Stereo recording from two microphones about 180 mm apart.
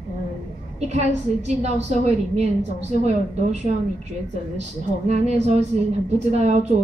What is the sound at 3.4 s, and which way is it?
A woman's voice, 40° right (ahead or behind).